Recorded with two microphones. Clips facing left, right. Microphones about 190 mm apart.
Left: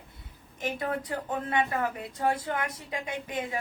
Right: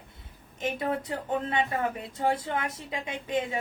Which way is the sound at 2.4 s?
25° right (ahead or behind).